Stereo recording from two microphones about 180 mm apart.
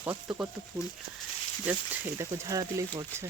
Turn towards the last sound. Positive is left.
turn(degrees=-15)  # may be behind; listen again after turning